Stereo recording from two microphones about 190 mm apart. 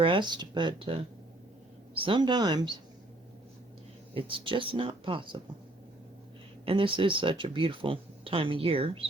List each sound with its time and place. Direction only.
0.0 s speech: 25° right (ahead or behind)
2.0 s speech: 25° right (ahead or behind)
4.1 s speech: 25° right (ahead or behind)
6.7 s speech: 25° right (ahead or behind)